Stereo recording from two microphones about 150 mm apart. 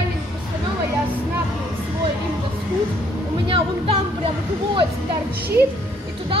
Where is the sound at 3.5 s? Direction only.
40° right (ahead or behind).